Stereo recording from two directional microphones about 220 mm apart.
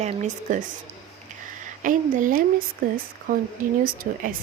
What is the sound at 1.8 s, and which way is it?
A woman's voice, 35° right (ahead or behind).